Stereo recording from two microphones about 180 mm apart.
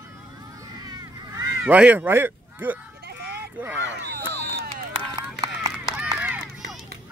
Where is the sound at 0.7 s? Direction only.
20° right (ahead or behind).